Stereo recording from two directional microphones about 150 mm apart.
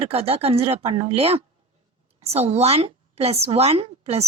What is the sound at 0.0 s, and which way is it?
A woman's voice, 40° right (ahead or behind).